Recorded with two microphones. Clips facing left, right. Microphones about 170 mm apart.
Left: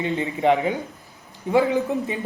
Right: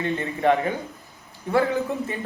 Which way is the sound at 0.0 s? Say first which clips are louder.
Left 1 dB; 15° left (ahead or behind).